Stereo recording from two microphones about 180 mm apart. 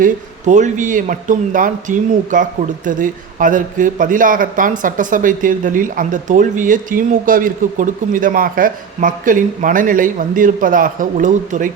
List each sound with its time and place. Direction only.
0.0 s speech: 40° right (ahead or behind)